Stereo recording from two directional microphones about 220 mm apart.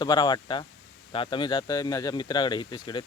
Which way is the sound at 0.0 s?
20° left (ahead or behind).